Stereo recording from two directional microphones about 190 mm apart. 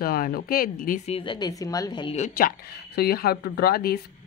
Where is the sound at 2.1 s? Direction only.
45° left (ahead or behind).